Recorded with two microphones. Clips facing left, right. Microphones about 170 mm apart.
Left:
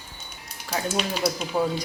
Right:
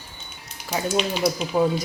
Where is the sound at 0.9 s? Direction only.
Centre (ahead or behind).